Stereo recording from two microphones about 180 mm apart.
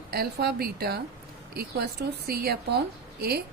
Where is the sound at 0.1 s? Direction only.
60° right (ahead or behind).